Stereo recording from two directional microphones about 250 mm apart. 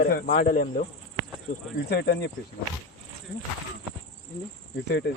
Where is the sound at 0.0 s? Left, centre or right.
Left.